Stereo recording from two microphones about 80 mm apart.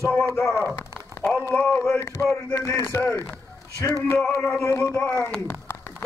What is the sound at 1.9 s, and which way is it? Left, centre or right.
A man's voice, left.